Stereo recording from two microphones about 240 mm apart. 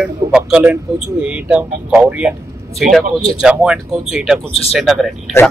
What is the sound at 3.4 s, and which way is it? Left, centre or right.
A man's voice, centre.